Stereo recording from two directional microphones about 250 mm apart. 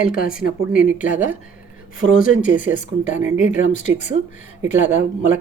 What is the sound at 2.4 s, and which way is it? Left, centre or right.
Speech, left.